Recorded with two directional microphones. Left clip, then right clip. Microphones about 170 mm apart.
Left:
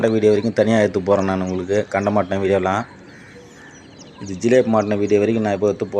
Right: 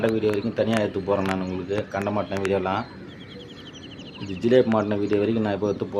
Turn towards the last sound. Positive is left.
turn(degrees=15)  # may be behind; listen again after turning